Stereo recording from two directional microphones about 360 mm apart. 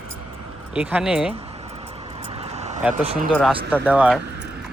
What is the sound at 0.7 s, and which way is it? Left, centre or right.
Speech, centre.